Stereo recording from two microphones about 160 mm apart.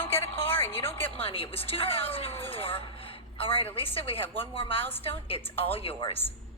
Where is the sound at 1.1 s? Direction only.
35° left (ahead or behind).